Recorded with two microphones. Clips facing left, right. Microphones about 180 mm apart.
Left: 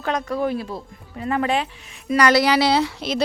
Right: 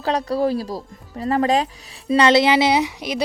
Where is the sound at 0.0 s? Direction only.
35° right (ahead or behind).